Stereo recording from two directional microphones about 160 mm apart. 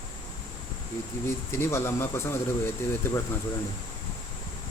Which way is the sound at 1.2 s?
15° left (ahead or behind).